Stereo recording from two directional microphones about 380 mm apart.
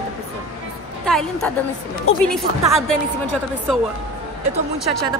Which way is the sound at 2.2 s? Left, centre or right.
Centre.